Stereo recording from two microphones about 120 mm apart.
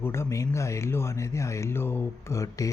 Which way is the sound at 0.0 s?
20° left (ahead or behind).